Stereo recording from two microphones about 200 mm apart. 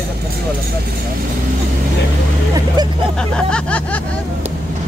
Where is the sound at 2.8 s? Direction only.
20° right (ahead or behind).